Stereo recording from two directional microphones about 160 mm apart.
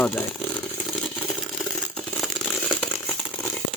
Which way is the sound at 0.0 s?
5° left (ahead or behind).